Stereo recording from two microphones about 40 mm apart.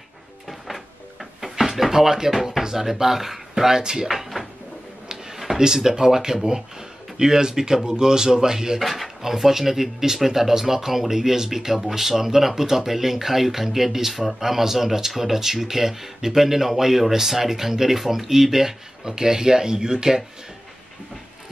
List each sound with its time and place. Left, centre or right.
0.5 s cupboard open or close: centre
1.4 s drawer open or close: centre
2.6 s speech: centre
4.1 s cupboard open or close: centre
5.0 s drawer open or close: centre
5.6 s speech: centre
8.8 s speech: centre